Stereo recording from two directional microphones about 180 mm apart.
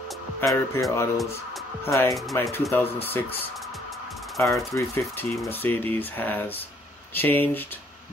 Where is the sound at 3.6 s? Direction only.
Centre (ahead or behind).